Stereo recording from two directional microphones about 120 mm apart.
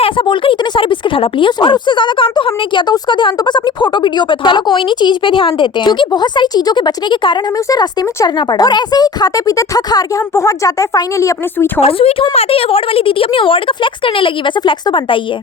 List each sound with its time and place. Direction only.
0.0 s speech: 50° left (ahead or behind); by 11.7 s 25° left (ahead or behind)
11.8 s a woman's voice: 55° left (ahead or behind)